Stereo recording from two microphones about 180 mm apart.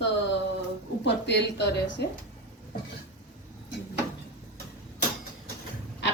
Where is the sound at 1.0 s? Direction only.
75° left (ahead or behind).